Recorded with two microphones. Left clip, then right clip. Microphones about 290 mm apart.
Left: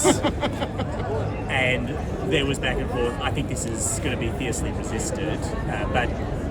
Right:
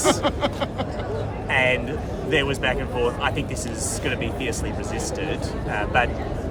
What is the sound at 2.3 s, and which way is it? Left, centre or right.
Speech, centre.